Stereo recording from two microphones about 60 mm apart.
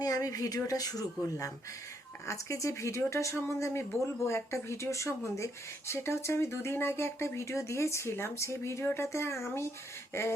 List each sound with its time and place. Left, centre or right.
0.0 s speech: left
2.2 s speech: left
3.3 s speech: left